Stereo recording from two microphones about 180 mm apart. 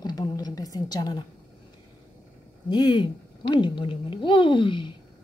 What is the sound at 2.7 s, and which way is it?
Speech, 25° left (ahead or behind).